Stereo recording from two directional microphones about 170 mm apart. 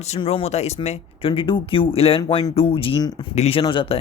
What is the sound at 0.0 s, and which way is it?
Speech, 40° left (ahead or behind).